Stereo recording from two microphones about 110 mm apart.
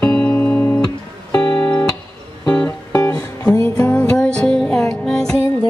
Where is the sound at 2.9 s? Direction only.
30° left (ahead or behind).